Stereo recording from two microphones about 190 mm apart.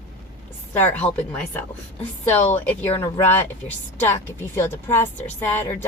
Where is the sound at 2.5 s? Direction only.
10° left (ahead or behind).